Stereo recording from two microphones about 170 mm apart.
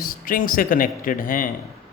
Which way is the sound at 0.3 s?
55° left (ahead or behind).